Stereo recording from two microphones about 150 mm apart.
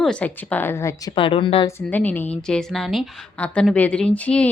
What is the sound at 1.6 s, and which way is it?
A woman's voice, 10° left (ahead or behind).